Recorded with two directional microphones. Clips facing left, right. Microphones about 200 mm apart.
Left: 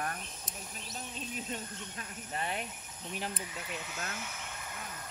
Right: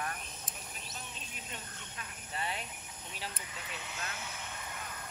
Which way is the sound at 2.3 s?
50° left (ahead or behind).